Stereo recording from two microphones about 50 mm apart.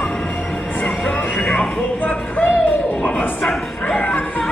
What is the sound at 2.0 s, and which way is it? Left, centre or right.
Speech, left.